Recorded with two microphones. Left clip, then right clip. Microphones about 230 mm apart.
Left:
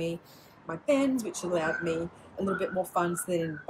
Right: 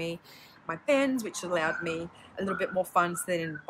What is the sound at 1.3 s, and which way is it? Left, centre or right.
Speech, centre.